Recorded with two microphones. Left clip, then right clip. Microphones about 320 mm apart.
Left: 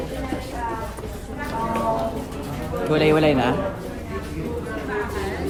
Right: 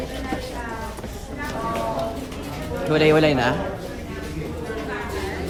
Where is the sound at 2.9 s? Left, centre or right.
Centre.